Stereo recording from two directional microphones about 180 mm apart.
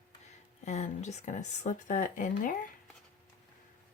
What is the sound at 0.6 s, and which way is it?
Speech, 40° left (ahead or behind).